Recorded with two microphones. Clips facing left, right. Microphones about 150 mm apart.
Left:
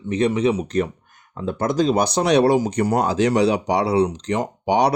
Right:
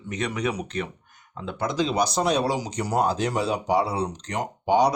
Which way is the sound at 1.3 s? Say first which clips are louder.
Left 6 dB; 45° left (ahead or behind).